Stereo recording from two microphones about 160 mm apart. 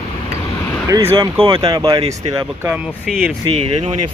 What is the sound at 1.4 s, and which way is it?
Speech, 30° right (ahead or behind).